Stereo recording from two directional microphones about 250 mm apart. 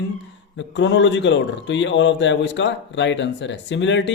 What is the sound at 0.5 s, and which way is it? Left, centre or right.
A man's voice, left.